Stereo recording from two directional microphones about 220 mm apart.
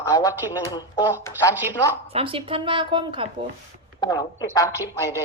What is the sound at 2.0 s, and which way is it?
Speech, 25° right (ahead or behind).